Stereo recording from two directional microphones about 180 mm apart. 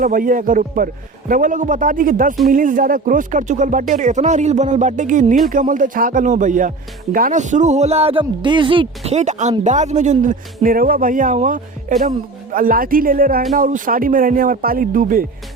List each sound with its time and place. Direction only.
0.0 s speech: 50° right (ahead or behind)